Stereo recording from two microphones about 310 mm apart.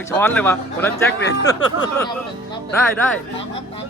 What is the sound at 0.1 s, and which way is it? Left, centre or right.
A man's voice, centre.